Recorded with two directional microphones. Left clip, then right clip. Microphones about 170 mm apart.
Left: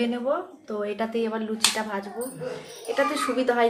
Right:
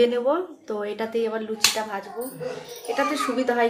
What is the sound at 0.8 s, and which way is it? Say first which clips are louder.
Speech: left 2 dB; 10° right (ahead or behind).